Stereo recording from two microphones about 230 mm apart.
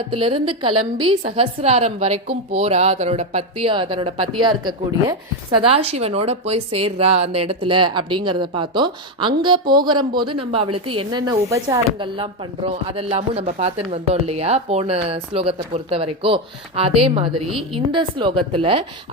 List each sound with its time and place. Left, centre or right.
0.1 s a woman's voice: right